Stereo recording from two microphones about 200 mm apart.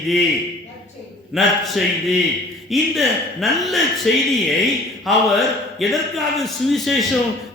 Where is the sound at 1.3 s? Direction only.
Centre (ahead or behind).